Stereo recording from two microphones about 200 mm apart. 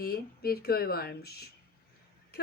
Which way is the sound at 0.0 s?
50° left (ahead or behind).